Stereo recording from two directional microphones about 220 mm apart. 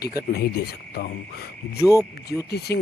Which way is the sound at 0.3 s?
45° left (ahead or behind).